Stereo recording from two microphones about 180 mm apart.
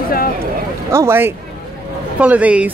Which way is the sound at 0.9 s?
15° right (ahead or behind).